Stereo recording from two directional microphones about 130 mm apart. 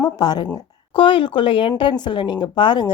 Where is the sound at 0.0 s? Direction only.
35° left (ahead or behind).